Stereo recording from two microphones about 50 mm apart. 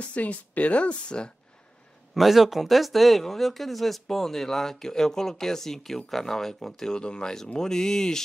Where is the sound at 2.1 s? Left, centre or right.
Centre.